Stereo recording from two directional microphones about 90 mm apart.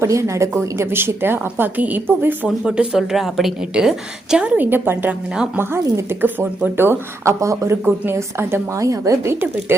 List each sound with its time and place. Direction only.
0.0 s speech: 35° right (ahead or behind)
2.6 s a woman's voice: 10° right (ahead or behind)
4.5 s speech: 20° right (ahead or behind)
5.8 s speech: 30° right (ahead or behind)
6.2 s speech: 20° right (ahead or behind)